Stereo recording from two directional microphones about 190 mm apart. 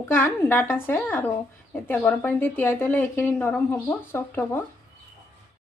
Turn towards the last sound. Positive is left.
turn(degrees=10)  # may be behind; listen again after turning